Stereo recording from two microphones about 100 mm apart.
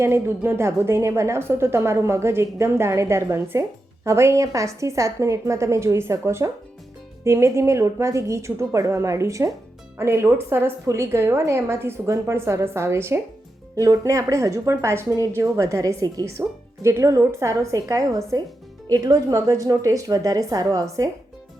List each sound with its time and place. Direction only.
0.0 s a woman's voice: 25° right (ahead or behind)